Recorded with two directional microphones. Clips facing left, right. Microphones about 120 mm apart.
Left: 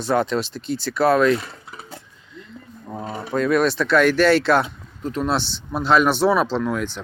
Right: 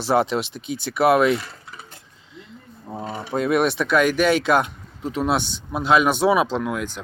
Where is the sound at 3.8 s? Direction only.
10° right (ahead or behind).